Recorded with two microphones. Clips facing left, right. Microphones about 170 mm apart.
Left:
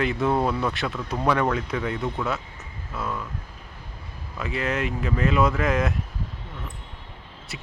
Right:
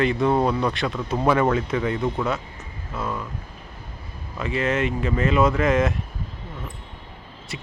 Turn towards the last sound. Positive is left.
turn(degrees=0)  # may be behind; listen again after turning